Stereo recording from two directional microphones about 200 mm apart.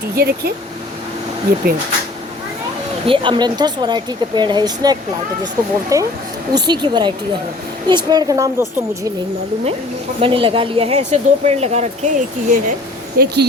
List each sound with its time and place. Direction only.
0.2 s speech: 50° right (ahead or behind)
3.1 s speech: 25° right (ahead or behind)
10.2 s speech: 25° right (ahead or behind); by 13.3 s 50° right (ahead or behind)